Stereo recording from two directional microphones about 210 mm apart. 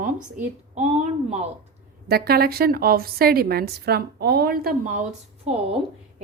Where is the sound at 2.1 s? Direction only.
45° right (ahead or behind).